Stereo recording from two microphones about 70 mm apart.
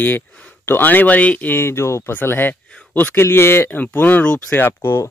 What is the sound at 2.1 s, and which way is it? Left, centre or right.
Speech, left.